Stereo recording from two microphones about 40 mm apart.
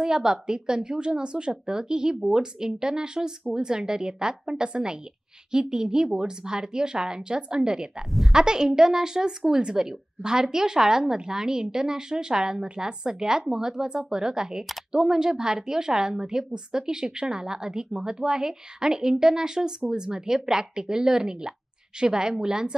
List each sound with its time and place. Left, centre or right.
0.0 s a woman's voice: centre